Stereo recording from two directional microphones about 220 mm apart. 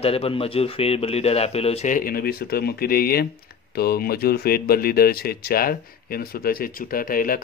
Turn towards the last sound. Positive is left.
turn(degrees=40)  # may be behind; listen again after turning